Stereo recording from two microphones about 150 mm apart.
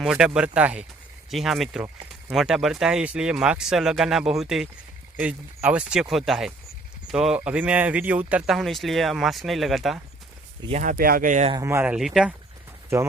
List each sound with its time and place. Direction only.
0.0 s speech: 5° right (ahead or behind)
10.7 s speech: 50° right (ahead or behind)
10.9 s speech: 75° right (ahead or behind)
11.5 s speech: 20° right (ahead or behind)
11.9 s speech: 5° right (ahead or behind)